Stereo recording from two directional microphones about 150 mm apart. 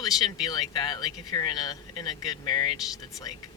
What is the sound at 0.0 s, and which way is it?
Speech, 25° left (ahead or behind).